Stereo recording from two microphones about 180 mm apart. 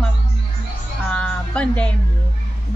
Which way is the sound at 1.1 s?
5° left (ahead or behind).